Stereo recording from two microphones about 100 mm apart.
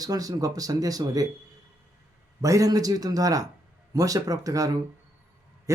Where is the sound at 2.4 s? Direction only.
35° right (ahead or behind).